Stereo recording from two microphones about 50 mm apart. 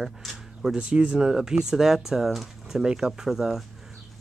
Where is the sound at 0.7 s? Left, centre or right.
Right.